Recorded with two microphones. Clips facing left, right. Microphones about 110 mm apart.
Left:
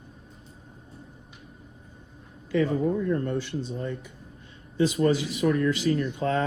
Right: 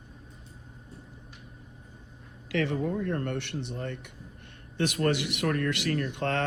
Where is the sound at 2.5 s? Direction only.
85° right.